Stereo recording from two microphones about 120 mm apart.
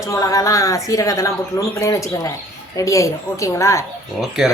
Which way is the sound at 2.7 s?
25° left (ahead or behind).